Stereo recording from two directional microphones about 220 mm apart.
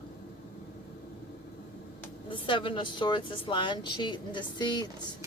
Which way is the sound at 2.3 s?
20° left (ahead or behind).